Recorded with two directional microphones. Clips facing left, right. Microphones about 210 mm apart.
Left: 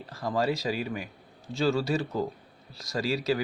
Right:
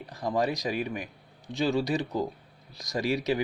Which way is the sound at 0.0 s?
15° right (ahead or behind).